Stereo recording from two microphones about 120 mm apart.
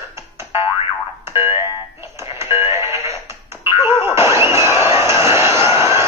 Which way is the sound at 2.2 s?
20° right (ahead or behind).